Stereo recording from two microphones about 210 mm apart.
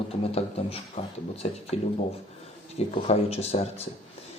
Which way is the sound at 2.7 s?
30° left (ahead or behind).